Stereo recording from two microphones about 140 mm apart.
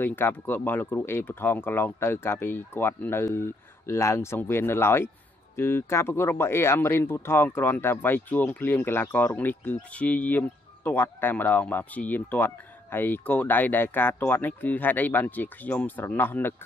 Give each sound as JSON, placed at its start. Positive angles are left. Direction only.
{"t": 0.0, "sound": "speech", "side_deg": 15}